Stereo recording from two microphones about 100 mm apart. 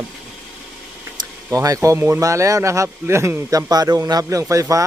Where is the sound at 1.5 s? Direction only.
35° right (ahead or behind).